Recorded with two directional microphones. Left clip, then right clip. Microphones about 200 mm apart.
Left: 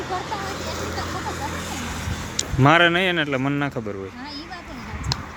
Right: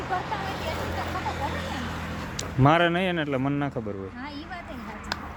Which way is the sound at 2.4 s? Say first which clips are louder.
Left 5 dB; centre (ahead or behind).